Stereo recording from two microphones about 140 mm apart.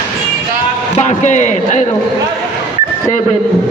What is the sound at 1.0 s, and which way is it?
Speech, 55° left (ahead or behind).